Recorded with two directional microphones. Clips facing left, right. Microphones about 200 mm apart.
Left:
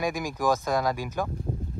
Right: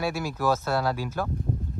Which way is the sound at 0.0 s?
15° left (ahead or behind).